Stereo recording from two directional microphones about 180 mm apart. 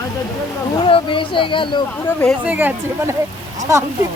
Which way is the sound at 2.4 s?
10° right (ahead or behind).